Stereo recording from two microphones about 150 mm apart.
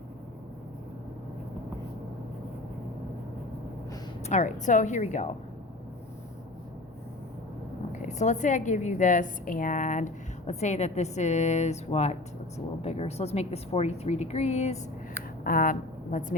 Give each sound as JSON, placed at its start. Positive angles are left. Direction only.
{"t": 4.2, "sound": "a woman's voice", "side_deg": 50}
{"t": 8.0, "sound": "a woman's voice", "side_deg": 55}
{"t": 15.4, "sound": "a woman's voice", "side_deg": 65}